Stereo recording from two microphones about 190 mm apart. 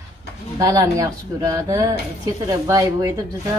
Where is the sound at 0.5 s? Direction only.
20° right (ahead or behind).